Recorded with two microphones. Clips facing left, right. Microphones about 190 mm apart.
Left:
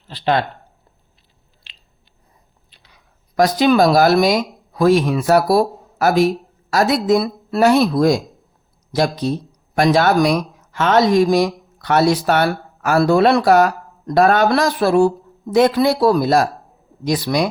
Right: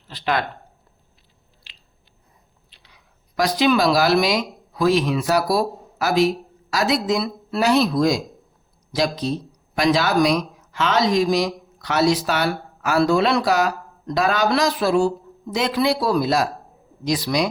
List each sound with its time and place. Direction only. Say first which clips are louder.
0.1 s speech: left 5 dB; 30° left (ahead or behind)
2.9 s speech: left 6 dB; 50° left (ahead or behind)